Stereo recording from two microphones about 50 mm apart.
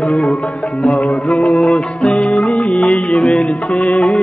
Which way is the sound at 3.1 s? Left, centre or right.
Centre.